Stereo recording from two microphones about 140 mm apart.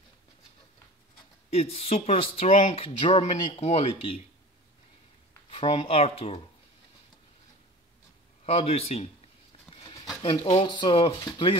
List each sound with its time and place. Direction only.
1.5 s speech: 45° left (ahead or behind)
5.5 s speech: 40° left (ahead or behind)
8.5 s speech: 45° left (ahead or behind)
9.7 s a sound: centre (ahead or behind)
10.2 s speech: 30° left (ahead or behind)